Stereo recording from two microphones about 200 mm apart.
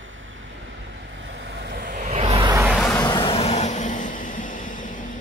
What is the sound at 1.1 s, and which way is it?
Vehicle, 65° right (ahead or behind).